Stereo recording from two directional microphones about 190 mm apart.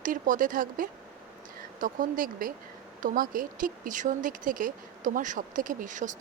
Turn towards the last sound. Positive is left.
turn(degrees=-40)  # may be behind; listen again after turning